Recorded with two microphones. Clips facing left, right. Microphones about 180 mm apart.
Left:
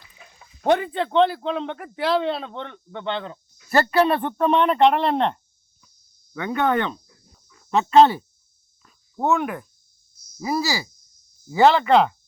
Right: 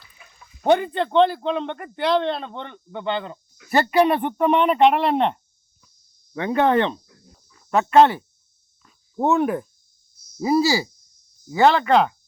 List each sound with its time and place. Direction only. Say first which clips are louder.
0.6 s a man's voice: right 2 dB; centre (ahead or behind)
3.7 s speech: right 1 dB; 15° right (ahead or behind)
6.3 s speech: right 3 dB; 30° right (ahead or behind)
9.2 s speech: right 3 dB; 35° right (ahead or behind)
11.4 s a man's voice: left 1 dB; 5° left (ahead or behind)